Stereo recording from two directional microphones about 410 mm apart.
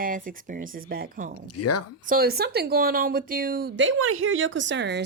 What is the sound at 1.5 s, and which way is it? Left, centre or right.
Speech, left.